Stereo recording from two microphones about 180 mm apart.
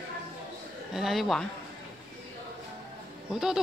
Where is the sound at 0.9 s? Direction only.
Centre (ahead or behind).